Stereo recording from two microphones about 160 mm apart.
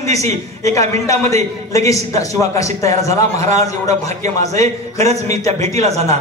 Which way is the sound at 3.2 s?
45° right (ahead or behind).